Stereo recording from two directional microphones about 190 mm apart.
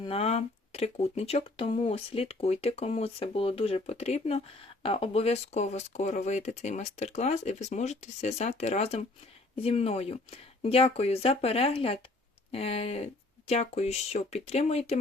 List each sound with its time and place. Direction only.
0.0 s speech: 30° left (ahead or behind)